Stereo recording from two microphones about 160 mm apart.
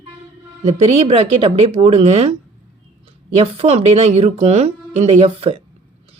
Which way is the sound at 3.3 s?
40° right (ahead or behind).